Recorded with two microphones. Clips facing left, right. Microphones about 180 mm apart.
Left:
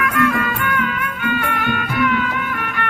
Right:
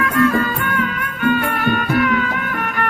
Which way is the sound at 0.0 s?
35° right (ahead or behind).